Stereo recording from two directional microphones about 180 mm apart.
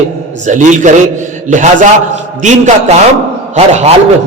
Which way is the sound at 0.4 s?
40° right (ahead or behind).